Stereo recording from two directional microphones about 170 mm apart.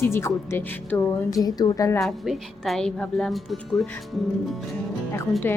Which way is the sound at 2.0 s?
Centre (ahead or behind).